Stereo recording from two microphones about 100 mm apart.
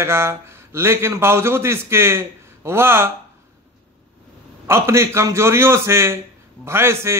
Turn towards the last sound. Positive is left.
turn(degrees=-25)  # may be behind; listen again after turning